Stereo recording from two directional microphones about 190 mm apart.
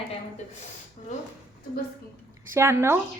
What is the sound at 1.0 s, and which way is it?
Speech, 35° left (ahead or behind).